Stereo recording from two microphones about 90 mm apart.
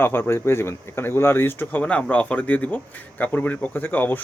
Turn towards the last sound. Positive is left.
turn(degrees=20)  # may be behind; listen again after turning